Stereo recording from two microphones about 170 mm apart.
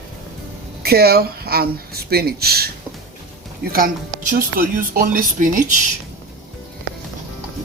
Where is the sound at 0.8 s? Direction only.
65° right (ahead or behind).